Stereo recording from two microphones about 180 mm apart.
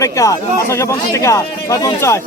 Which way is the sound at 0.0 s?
15° left (ahead or behind).